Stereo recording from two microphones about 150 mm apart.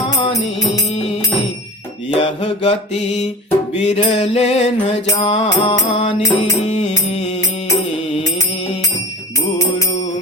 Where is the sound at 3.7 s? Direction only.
50° left (ahead or behind).